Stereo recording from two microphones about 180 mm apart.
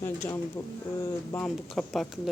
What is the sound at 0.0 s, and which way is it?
A woman's voice, 10° left (ahead or behind).